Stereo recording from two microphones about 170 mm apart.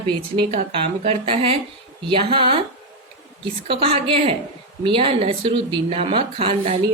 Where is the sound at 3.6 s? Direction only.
30° right (ahead or behind).